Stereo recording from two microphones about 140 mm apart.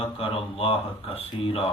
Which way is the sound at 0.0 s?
40° left (ahead or behind).